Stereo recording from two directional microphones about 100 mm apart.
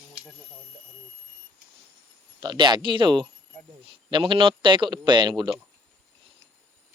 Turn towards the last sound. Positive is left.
turn(degrees=-50)  # may be behind; listen again after turning